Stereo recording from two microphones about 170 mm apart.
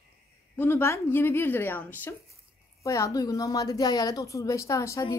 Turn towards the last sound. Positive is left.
turn(degrees=20)  # may be behind; listen again after turning